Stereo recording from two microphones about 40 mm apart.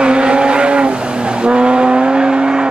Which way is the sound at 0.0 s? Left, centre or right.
Right.